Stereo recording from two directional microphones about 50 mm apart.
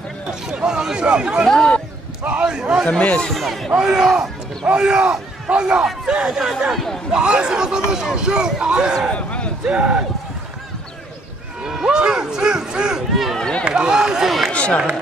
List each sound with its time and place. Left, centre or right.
0.3 s a man's voice: centre
3.3 s speech: centre
3.7 s speech: centre
6.7 s speech: centre
7.1 s speech: centre
9.1 s a sound: left
9.7 s speech: right
11.6 s speech: centre
13.1 s speech: centre
13.4 s speech: centre
13.7 s speech: centre
14.5 s run: left